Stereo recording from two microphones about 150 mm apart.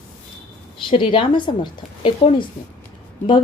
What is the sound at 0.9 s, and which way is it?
Speech, 30° left (ahead or behind).